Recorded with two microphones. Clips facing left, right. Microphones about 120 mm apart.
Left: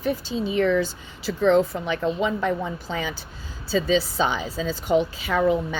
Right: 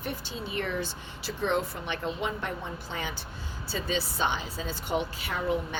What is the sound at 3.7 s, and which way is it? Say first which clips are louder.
Speech: left 10 dB; 90° left.